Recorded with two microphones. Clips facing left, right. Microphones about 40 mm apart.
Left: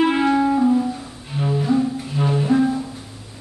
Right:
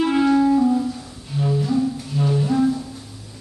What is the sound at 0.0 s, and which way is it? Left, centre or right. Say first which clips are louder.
Music: even; left.